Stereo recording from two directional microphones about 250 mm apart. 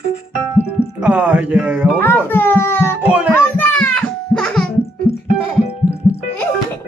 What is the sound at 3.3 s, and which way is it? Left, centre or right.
Music, centre.